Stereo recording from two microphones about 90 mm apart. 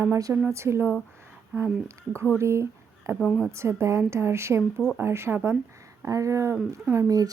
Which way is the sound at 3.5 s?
30° right (ahead or behind).